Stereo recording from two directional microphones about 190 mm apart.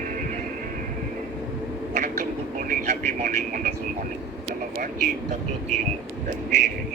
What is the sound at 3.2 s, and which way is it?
Speech, 40° right (ahead or behind).